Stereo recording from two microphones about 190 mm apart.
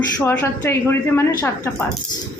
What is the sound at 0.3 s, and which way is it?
A woman's voice, 10° left (ahead or behind).